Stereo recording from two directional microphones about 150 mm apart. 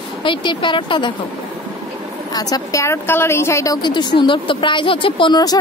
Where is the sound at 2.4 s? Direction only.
25° left (ahead or behind).